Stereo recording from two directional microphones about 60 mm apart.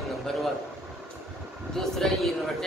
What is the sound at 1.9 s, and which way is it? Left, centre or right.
Speech, centre.